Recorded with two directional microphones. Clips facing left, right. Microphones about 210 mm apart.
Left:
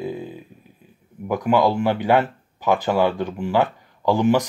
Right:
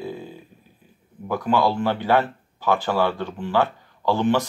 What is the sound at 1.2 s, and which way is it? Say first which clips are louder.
Speech: left 3 dB; 15° left (ahead or behind).